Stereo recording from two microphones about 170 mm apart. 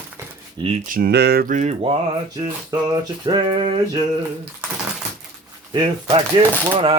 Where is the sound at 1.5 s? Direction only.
45° right (ahead or behind).